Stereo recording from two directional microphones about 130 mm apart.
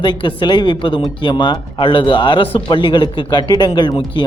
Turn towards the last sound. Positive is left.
turn(degrees=40)  # may be behind; listen again after turning